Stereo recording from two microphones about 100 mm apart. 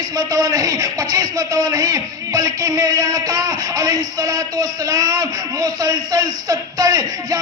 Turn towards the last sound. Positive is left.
turn(degrees=-35)  # may be behind; listen again after turning